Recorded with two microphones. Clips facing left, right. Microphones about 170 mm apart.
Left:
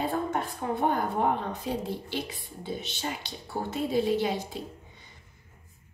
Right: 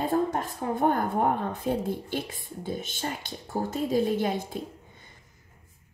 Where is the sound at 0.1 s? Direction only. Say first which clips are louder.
Right 4 dB; 45° right (ahead or behind).